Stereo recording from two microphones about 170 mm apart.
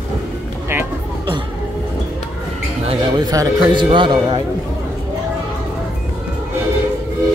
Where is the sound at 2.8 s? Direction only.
25° right (ahead or behind).